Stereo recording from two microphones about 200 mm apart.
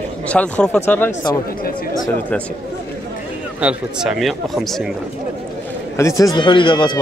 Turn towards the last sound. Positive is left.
turn(degrees=25)  # may be behind; listen again after turning